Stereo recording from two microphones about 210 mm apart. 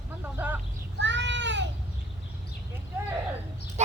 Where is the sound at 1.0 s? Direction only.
60° right (ahead or behind).